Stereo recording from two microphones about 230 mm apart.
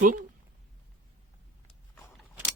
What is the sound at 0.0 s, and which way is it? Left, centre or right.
Speech, right.